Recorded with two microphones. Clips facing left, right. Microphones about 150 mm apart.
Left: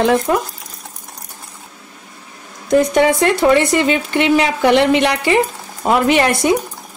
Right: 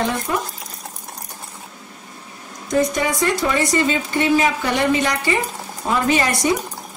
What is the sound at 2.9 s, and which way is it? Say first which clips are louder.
Speech: left 7 dB; 65° left (ahead or behind).